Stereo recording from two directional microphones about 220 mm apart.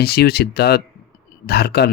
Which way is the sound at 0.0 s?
45° left (ahead or behind).